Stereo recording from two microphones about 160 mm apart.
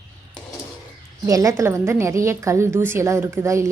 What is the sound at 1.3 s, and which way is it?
A woman's voice, 20° right (ahead or behind).